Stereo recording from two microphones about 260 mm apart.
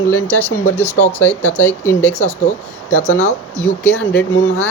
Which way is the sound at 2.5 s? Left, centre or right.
Left.